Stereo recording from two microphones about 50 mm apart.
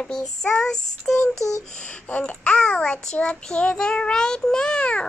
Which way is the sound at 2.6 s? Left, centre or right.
Centre.